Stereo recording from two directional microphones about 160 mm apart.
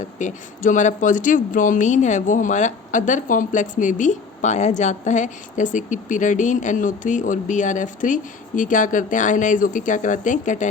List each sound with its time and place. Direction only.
0.0 s speech: 50° left (ahead or behind)